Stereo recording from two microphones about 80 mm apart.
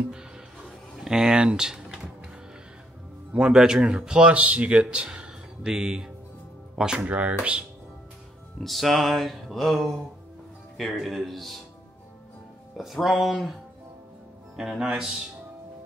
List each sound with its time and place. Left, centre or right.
0.9 s speech: centre
3.3 s speech: centre
8.6 s speech: centre
12.7 s speech: centre
14.6 s speech: centre